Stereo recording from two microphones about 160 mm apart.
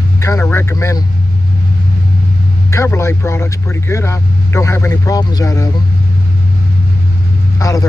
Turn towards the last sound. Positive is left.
turn(degrees=20)  # may be behind; listen again after turning